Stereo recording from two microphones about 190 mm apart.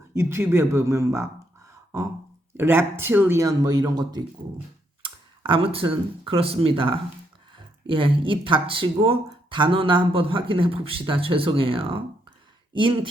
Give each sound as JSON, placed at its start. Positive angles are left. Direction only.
{"t": 0.1, "sound": "speech", "side_deg": -15}
{"t": 2.6, "sound": "speech", "side_deg": -10}